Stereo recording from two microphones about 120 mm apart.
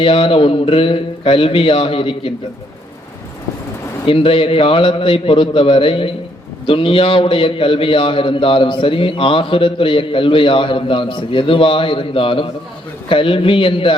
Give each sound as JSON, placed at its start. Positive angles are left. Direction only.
{"t": 0.0, "sound": "a man's voice", "side_deg": 50}
{"t": 4.0, "sound": "a man's voice", "side_deg": 50}